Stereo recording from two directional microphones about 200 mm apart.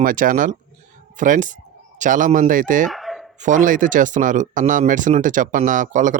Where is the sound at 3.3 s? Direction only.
40° right (ahead or behind).